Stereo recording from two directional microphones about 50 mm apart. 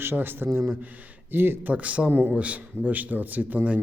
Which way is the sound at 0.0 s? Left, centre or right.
Right.